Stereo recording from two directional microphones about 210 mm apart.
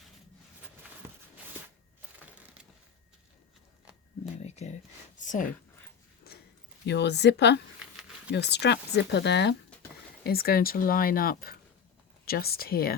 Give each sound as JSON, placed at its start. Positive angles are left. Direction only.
{"t": 4.4, "sound": "a sound", "side_deg": 30}
{"t": 5.2, "sound": "speech", "side_deg": 35}
{"t": 6.8, "sound": "speech", "side_deg": 55}